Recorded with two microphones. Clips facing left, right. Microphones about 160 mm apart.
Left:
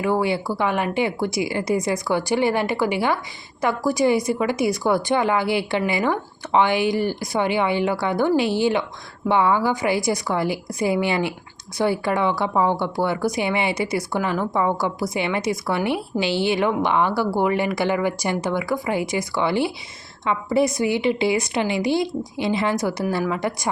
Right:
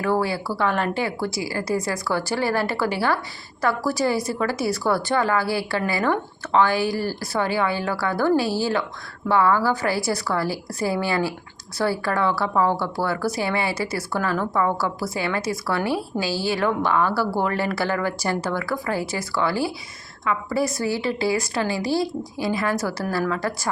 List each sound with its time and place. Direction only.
0.0 s a woman's voice: 15° left (ahead or behind)